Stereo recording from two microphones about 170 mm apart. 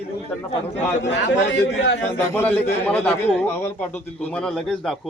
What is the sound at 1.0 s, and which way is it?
Speech, 90° left.